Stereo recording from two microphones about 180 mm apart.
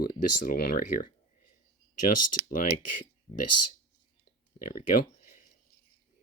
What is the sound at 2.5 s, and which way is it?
Speech, 50° left (ahead or behind).